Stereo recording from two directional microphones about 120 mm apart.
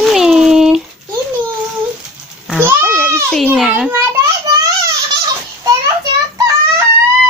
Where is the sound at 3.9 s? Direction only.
20° right (ahead or behind).